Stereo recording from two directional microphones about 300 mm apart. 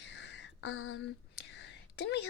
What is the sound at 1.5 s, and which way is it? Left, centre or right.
Whispering, left.